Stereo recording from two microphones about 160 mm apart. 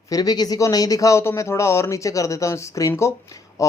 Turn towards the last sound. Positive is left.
turn(degrees=20)  # may be behind; listen again after turning